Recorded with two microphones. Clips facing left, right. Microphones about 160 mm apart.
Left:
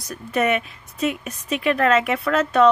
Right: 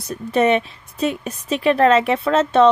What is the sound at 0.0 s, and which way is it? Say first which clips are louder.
A woman's voice: right 5 dB; 30° right (ahead or behind).